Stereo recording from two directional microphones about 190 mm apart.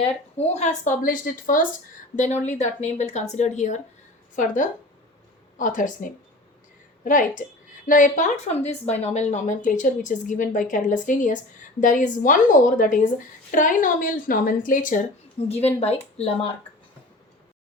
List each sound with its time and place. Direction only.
0.0 s a woman's voice: 35° left (ahead or behind)
15.4 s a woman's voice: 35° left (ahead or behind)